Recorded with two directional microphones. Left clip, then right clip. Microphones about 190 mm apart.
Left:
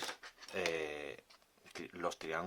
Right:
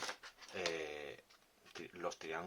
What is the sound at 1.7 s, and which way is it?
Speech, 35° left (ahead or behind).